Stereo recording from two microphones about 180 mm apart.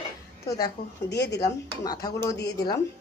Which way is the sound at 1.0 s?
70° left (ahead or behind).